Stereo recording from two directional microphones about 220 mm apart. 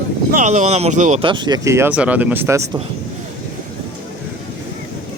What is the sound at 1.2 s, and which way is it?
Speech, 20° right (ahead or behind).